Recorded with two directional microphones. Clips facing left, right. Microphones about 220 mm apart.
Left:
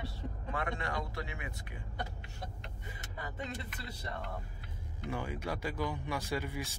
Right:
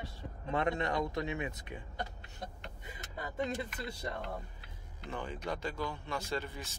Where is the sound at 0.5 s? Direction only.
25° right (ahead or behind).